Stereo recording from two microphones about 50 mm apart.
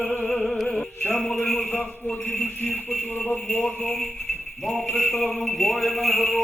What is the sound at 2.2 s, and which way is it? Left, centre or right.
Speech, left.